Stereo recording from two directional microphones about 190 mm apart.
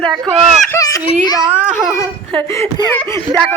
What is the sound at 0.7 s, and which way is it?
Baby cry, 20° left (ahead or behind).